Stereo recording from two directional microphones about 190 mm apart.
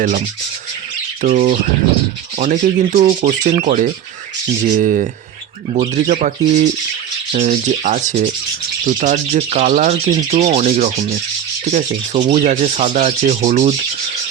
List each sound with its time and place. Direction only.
1.2 s speech: 40° right (ahead or behind)